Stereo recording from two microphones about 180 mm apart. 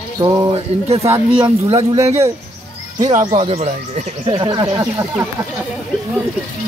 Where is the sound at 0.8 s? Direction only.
35° right (ahead or behind).